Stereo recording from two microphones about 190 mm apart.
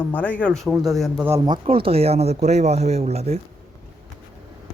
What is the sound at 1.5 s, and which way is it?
Speech, 30° right (ahead or behind).